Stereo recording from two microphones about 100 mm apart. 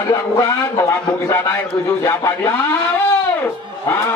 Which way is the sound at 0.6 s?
20° left (ahead or behind).